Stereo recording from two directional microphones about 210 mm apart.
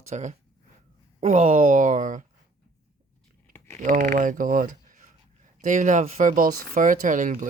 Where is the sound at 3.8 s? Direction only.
35° right (ahead or behind).